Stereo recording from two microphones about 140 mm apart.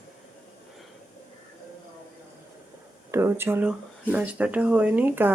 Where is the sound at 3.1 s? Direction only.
15° right (ahead or behind).